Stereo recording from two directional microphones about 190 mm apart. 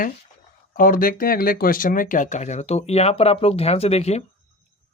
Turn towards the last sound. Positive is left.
turn(degrees=35)  # may be behind; listen again after turning